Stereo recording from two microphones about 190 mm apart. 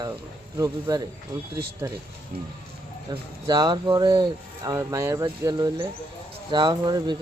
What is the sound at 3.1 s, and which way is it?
Speech, 20° right (ahead or behind).